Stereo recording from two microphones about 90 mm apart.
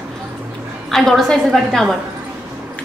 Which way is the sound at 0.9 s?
5° left (ahead or behind).